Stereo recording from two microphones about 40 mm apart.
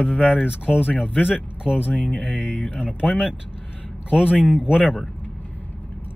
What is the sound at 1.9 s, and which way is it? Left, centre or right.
Speech, left.